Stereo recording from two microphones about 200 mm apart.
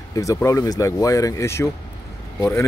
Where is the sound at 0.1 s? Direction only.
15° left (ahead or behind).